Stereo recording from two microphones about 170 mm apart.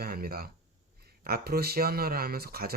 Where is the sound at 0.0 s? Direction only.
60° right (ahead or behind).